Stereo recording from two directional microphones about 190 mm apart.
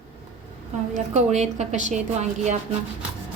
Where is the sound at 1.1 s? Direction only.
35° right (ahead or behind).